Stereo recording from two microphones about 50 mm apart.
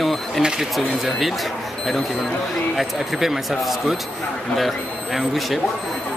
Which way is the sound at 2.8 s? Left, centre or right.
Centre.